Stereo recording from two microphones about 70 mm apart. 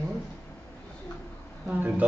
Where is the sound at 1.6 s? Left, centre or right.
Right.